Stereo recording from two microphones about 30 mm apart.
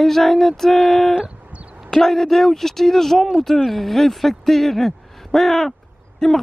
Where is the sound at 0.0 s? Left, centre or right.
Centre.